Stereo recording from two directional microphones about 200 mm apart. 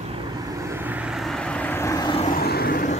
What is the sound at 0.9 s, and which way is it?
Vehicle, 5° right (ahead or behind).